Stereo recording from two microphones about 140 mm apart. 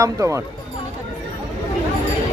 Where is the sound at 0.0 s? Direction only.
20° right (ahead or behind).